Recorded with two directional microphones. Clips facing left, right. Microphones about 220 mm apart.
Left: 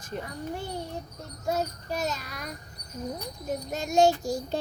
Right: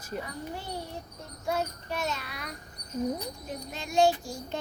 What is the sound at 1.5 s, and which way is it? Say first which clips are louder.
A child's voice: left 2 dB; 40° left (ahead or behind).